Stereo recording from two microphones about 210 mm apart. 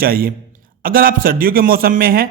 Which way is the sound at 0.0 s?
45° right (ahead or behind).